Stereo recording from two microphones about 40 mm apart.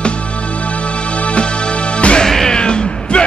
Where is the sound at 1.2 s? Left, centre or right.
Left.